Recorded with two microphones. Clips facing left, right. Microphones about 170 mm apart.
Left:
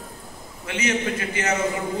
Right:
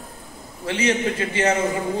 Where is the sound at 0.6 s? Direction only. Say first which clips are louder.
Right 3 dB; 30° right (ahead or behind).